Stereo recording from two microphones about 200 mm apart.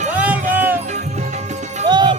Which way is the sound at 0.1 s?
5° right (ahead or behind).